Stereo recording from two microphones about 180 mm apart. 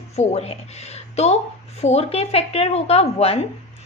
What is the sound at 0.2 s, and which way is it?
A woman's voice, 35° left (ahead or behind).